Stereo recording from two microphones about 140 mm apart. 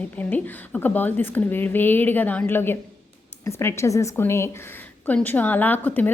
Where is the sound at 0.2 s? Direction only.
15° left (ahead or behind).